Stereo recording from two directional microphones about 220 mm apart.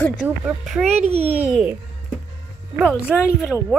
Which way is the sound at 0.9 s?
30° right (ahead or behind).